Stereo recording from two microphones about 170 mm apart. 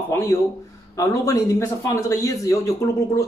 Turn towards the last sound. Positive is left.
turn(degrees=15)  # may be behind; listen again after turning